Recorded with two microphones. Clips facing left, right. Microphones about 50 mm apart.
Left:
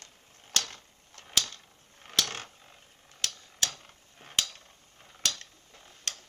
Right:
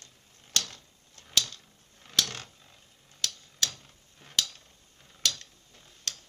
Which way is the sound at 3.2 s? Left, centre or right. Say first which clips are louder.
Even; left.